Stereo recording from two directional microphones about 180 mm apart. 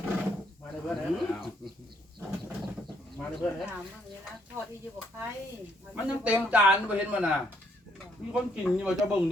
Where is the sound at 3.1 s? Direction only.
Centre (ahead or behind).